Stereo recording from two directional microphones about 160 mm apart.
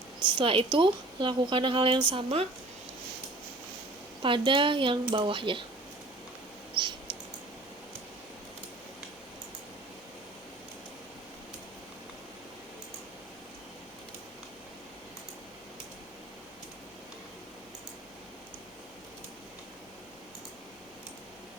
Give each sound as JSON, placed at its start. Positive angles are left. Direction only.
{"t": 0.2, "sound": "a woman's voice", "side_deg": -30}
{"t": 4.2, "sound": "a woman's voice", "side_deg": -30}
{"t": 6.8, "sound": "a sound", "side_deg": -30}